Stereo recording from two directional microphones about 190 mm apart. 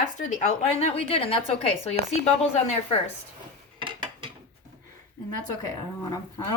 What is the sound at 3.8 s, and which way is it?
Dishes, 25° right (ahead or behind).